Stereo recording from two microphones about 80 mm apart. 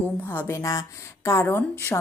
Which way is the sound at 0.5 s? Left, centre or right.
Left.